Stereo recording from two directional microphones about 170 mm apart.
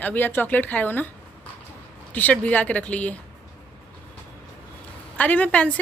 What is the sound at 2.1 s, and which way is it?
A woman's voice, 10° left (ahead or behind).